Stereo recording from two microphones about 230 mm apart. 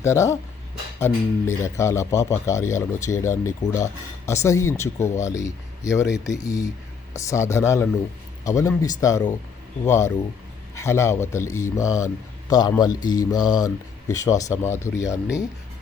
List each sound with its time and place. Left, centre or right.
0.0 s a man's voice: centre